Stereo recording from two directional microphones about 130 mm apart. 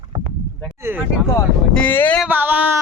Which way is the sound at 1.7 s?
10° left (ahead or behind).